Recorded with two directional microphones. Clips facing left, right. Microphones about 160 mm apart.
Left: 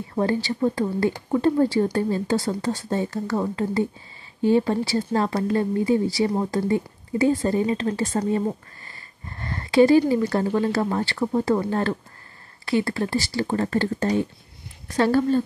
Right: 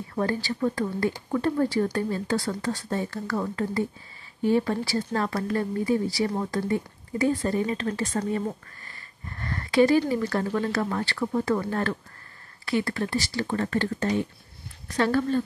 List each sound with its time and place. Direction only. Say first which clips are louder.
0.1 s speech: left 4 dB; 25° left (ahead or behind)